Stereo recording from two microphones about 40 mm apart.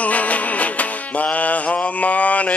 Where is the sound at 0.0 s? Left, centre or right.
Left.